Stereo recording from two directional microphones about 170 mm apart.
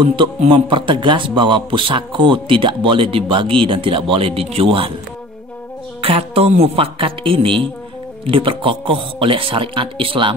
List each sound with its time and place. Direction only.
0.0 s a man's voice: 30° right (ahead or behind)
5.9 s a man's voice: 35° right (ahead or behind)